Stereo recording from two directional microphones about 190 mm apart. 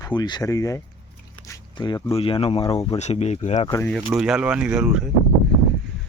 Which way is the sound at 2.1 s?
30° left (ahead or behind).